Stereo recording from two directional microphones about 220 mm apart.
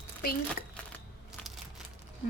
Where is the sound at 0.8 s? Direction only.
5° left (ahead or behind).